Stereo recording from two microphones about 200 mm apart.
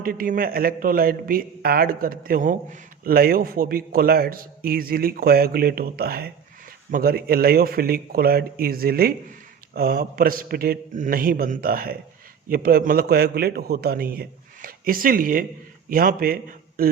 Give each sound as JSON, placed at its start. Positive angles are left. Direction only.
{"t": 0.0, "sound": "a man's voice", "side_deg": -45}